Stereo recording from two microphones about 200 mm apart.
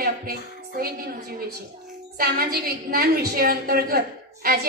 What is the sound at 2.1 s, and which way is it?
A woman's voice, 50° right (ahead or behind).